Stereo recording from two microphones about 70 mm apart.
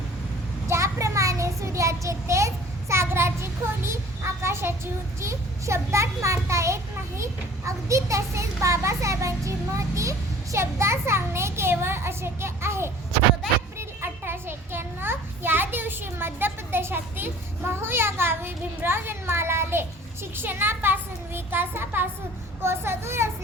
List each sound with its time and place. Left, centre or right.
0.7 s child singing: right
2.9 s a child's voice: right